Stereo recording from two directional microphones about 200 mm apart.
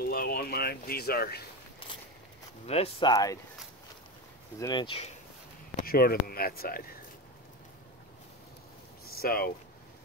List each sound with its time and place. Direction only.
0.0 s speech: 50° left (ahead or behind)
2.6 s speech: 30° left (ahead or behind)
4.6 s speech: 20° left (ahead or behind)
5.9 s speech: 50° left (ahead or behind)
9.1 s speech: 50° left (ahead or behind)